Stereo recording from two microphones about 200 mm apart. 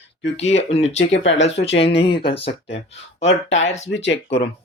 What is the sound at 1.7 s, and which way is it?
Speech, 30° left (ahead or behind).